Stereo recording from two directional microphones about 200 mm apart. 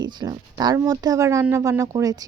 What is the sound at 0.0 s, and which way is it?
Speech, 20° right (ahead or behind).